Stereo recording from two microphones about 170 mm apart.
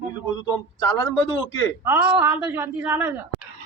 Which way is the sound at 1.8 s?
15° right (ahead or behind).